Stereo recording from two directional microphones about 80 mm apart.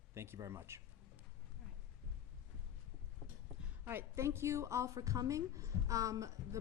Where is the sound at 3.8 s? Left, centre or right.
Right.